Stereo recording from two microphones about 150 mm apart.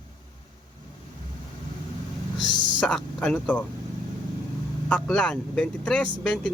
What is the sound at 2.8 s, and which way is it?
Speech, 5° left (ahead or behind).